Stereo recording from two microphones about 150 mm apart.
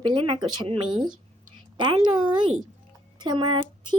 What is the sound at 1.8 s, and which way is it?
A woman's voice, 30° right (ahead or behind).